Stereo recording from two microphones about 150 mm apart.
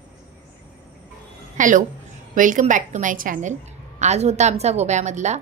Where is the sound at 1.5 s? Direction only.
60° right (ahead or behind).